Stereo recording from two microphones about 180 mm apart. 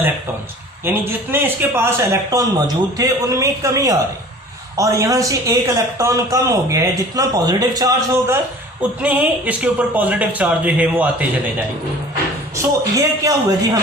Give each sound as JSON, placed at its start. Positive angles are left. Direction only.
{"t": 0.9, "sound": "a man's voice", "side_deg": -15}
{"t": 13.2, "sound": "speech", "side_deg": -20}